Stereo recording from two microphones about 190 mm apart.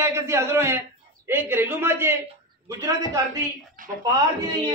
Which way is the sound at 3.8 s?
45° right (ahead or behind).